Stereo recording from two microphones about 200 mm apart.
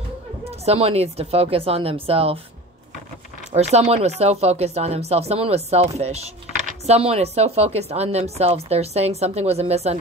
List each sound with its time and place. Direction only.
0.7 s speech: 30° right (ahead or behind)
3.5 s speech: 35° right (ahead or behind)